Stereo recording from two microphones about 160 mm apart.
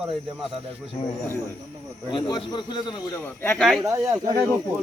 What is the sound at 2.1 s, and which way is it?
Speech, 30° left (ahead or behind).